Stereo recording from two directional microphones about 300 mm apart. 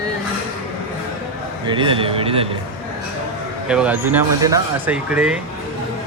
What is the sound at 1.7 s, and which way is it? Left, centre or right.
Speech, centre.